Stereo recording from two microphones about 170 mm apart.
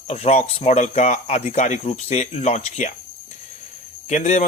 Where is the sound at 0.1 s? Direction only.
40° left (ahead or behind).